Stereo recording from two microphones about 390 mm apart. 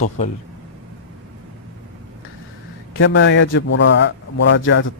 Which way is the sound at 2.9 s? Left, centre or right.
Left.